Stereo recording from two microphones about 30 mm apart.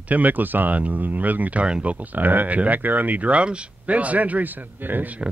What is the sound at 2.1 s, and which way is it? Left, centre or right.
Speech, right.